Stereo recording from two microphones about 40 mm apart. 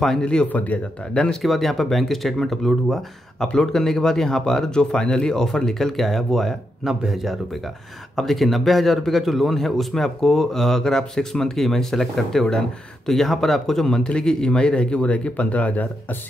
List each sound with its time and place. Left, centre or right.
0.2 s speech: left
0.5 s speech: left
1.1 s speech: centre
1.4 s a man's voice: centre; by 16.2 s left